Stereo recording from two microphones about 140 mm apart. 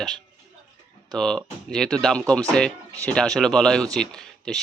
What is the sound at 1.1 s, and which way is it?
A man's voice, 5° left (ahead or behind).